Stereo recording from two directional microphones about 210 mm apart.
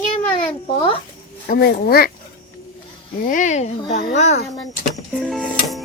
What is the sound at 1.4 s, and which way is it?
Child singing, 45° left (ahead or behind).